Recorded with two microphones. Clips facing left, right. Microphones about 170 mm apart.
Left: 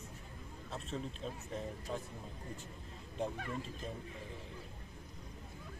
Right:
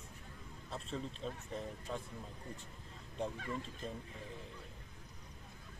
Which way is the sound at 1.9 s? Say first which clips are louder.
Left 1 dB; 5° left (ahead or behind).